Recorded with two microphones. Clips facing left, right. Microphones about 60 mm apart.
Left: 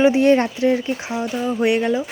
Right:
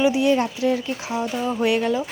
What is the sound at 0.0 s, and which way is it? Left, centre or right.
Speech, left.